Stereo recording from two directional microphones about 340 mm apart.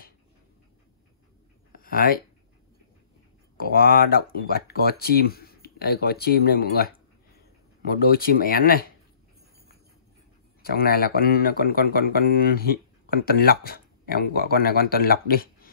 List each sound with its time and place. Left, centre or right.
1.7 s a sound: left
3.5 s speech: left
10.6 s speech: left